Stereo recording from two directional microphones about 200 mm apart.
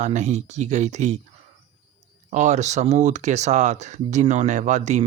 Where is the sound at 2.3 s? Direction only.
35° right (ahead or behind).